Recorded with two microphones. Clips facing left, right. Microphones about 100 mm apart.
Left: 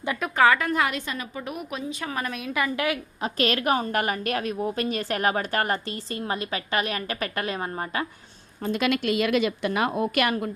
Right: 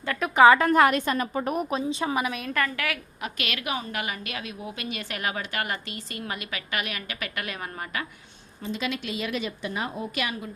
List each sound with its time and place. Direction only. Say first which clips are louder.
0.3 s a woman's voice: right 4 dB; 20° right (ahead or behind)
0.6 s a woman's voice: right 5 dB; 45° right (ahead or behind)
1.9 s a woman's voice: right 5 dB; 25° right (ahead or behind)
2.3 s a woman's voice: even; centre (ahead or behind)
2.6 s a woman's voice: left 4 dB; 20° left (ahead or behind)
8.6 s a woman's voice: left 7 dB; 60° left (ahead or behind)